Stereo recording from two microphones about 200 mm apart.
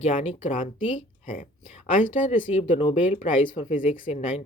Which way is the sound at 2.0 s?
40° left (ahead or behind).